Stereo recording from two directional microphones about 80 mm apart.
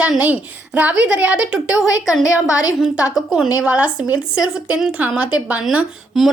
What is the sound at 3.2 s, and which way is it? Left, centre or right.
Speech, centre.